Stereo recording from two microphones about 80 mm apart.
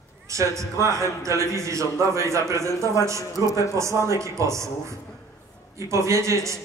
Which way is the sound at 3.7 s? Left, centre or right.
Right.